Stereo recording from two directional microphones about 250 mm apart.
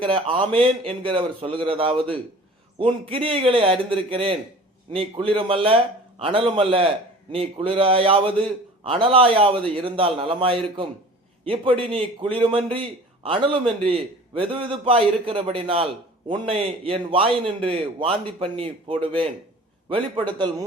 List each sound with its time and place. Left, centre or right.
0.0 s a man's voice: right